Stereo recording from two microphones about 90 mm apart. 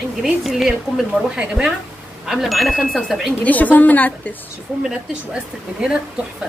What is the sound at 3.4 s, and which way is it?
Speech, 15° left (ahead or behind).